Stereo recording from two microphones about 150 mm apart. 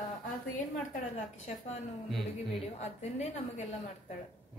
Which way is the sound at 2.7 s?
50° left (ahead or behind).